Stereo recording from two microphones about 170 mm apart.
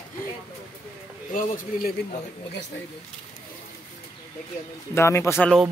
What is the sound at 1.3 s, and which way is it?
Speech, 55° left (ahead or behind).